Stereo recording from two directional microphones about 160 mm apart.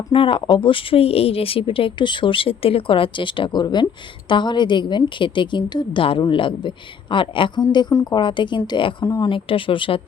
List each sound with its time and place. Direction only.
0.1 s a woman's voice: 35° left (ahead or behind)
9.3 s speech: 35° left (ahead or behind)